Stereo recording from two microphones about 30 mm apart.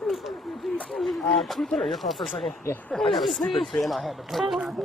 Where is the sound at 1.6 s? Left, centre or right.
Centre.